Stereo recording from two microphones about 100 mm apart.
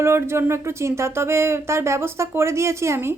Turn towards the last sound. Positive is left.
turn(degrees=-25)  # may be behind; listen again after turning